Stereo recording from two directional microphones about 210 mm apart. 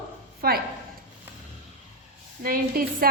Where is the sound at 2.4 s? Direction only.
45° right (ahead or behind).